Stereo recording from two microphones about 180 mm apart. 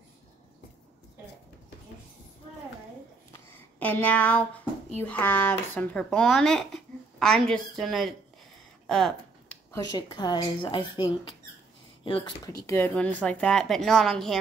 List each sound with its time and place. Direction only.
3.8 s speech: 10° left (ahead or behind)
8.8 s a sound: centre (ahead or behind)
9.7 s speech: 20° left (ahead or behind)
12.6 s speech: 10° left (ahead or behind)